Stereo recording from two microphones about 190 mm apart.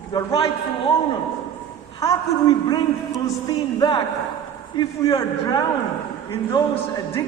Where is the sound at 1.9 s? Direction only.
20° left (ahead or behind).